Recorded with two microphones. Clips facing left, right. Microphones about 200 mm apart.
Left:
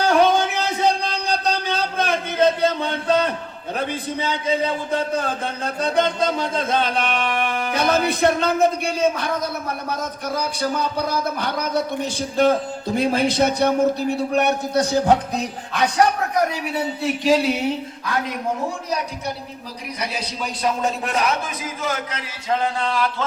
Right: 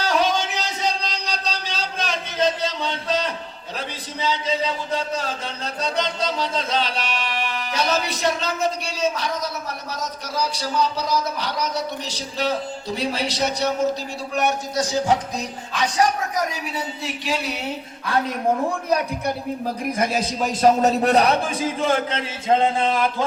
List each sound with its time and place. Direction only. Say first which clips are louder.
0.0 s a sound: left 5 dB; 55° left (ahead or behind)
3.8 s a man's voice: left 6 dB; 55° left (ahead or behind)
18.9 s a man's voice: right 4 dB; 55° right (ahead or behind); by 23.1 s 20° right (ahead or behind)